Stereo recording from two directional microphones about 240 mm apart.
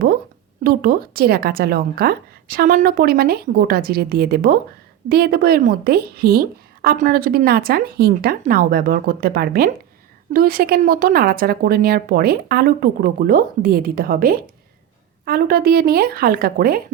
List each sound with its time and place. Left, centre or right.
0.6 s a woman's voice: right